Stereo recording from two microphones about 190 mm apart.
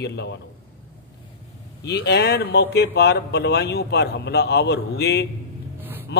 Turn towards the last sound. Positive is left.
turn(degrees=60)  # may be behind; listen again after turning